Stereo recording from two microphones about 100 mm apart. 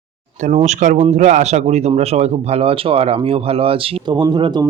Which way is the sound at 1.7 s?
90° right.